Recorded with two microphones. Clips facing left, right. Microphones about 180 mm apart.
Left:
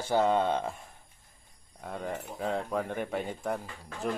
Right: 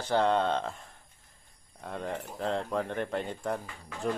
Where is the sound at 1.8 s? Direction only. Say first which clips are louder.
Even; 5° left (ahead or behind).